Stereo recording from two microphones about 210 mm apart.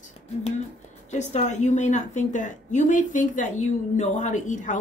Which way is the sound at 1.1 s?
35° left (ahead or behind).